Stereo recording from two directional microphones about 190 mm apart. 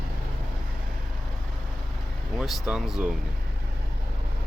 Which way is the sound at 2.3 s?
Centre (ahead or behind).